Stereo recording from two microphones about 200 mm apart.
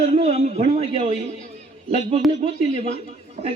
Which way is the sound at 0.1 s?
35° right (ahead or behind).